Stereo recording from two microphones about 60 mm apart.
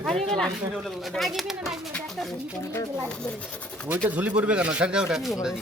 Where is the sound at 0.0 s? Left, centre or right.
Centre.